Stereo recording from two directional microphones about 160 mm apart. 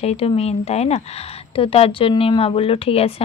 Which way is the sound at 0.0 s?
40° left (ahead or behind).